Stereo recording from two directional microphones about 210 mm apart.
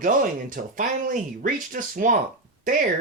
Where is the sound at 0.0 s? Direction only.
40° right (ahead or behind).